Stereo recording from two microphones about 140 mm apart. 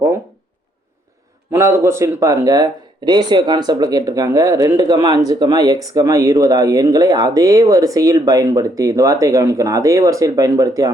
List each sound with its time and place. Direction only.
1.5 s speech: 20° right (ahead or behind)